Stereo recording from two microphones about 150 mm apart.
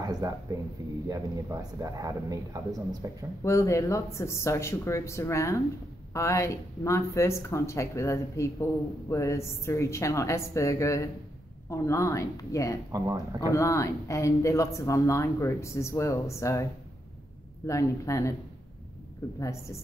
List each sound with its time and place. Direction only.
0.0 s a sound: 25° right (ahead or behind)
1.0 s speech: 25° right (ahead or behind)
3.4 s speech: 20° left (ahead or behind)
12.9 s speech: 20° right (ahead or behind)
13.5 s speech: 20° left (ahead or behind)
17.6 s speech: 20° left (ahead or behind)